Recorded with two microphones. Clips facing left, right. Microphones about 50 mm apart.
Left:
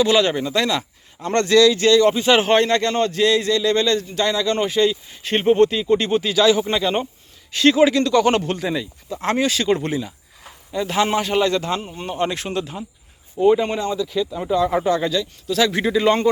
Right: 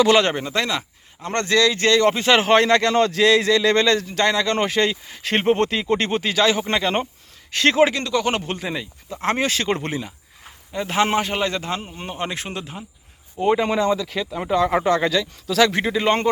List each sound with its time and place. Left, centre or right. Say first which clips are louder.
0.2 s speech: left 1 dB; right
2.4 s speech: right 1 dB; right
6.7 s speech: left 1 dB; right
8.1 s speech: left 5 dB; centre
8.4 s a man's voice: left 4 dB; right
13.6 s speech: right 2 dB; right
14.3 s speech: right 3 dB; right
15.9 s a man's voice: left 3 dB; right